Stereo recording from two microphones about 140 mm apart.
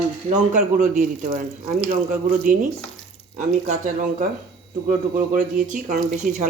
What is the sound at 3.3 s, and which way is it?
Speech, 60° right (ahead or behind).